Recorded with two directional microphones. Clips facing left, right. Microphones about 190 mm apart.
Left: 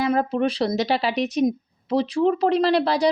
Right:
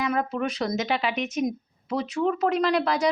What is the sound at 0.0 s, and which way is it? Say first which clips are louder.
Speech: left 5 dB; 30° left (ahead or behind).